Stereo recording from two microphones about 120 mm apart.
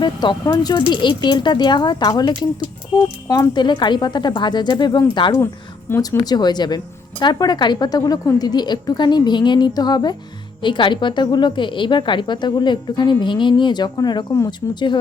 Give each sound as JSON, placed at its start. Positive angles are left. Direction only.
{"t": 0.0, "sound": "a woman's voice", "side_deg": 35}